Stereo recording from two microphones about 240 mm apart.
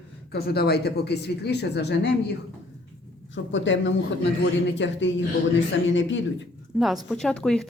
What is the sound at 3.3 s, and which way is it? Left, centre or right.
Speech, left.